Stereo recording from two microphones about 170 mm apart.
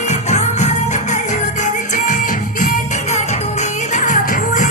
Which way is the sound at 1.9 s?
45° left (ahead or behind).